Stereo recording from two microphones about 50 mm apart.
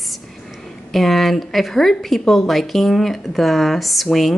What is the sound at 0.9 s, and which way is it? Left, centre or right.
Speech, centre.